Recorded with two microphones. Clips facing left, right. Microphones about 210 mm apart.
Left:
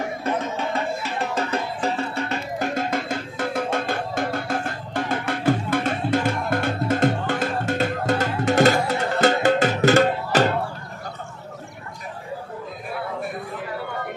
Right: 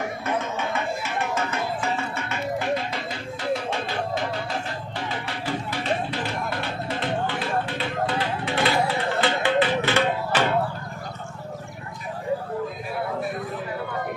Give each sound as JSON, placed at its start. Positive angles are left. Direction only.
{"t": 0.2, "sound": "music", "side_deg": 35}